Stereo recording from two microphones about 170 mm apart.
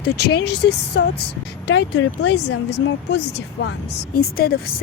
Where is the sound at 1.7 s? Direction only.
90° left.